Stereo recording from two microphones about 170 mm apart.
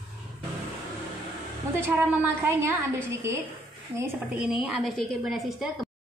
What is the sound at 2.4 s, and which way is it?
A woman's voice, 15° right (ahead or behind).